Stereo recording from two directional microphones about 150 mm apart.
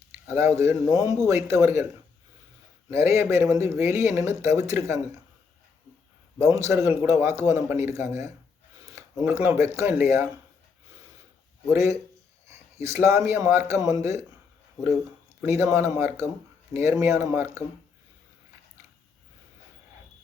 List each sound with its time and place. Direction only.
0.3 s a man's voice: 15° right (ahead or behind)
2.9 s speech: 20° right (ahead or behind)
6.4 s a man's voice: 20° right (ahead or behind)
11.7 s a man's voice: 20° right (ahead or behind)
15.4 s a man's voice: 20° right (ahead or behind)